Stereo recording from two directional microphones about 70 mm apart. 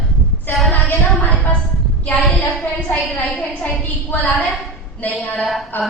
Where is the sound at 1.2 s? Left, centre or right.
Left.